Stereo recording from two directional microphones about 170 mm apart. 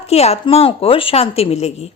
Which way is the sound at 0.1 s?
35° left (ahead or behind).